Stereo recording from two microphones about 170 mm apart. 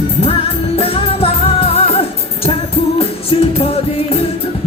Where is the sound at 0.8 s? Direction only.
35° left (ahead or behind).